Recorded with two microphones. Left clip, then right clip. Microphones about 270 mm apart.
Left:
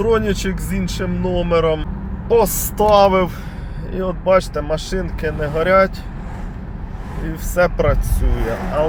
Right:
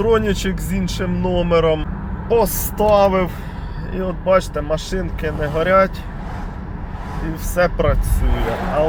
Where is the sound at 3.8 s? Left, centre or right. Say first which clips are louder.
Left 1 dB; centre.